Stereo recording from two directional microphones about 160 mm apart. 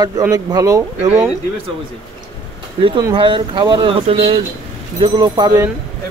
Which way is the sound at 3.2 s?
30° right (ahead or behind).